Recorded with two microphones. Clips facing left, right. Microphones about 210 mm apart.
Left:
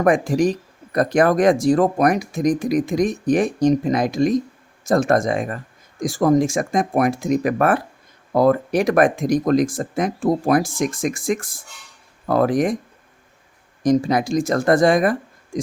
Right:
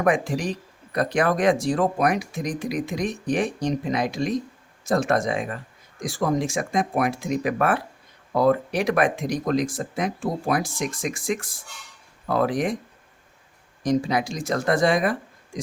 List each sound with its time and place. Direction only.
0.0 s speech: 45° left (ahead or behind)
13.8 s speech: 45° left (ahead or behind)
15.5 s a sound: 45° left (ahead or behind)